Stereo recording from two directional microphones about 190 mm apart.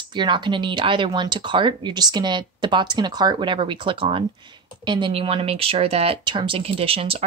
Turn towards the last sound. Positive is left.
turn(degrees=-30)  # may be behind; listen again after turning